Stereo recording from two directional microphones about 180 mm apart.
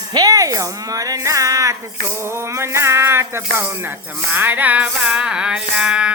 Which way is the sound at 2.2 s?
15° right (ahead or behind).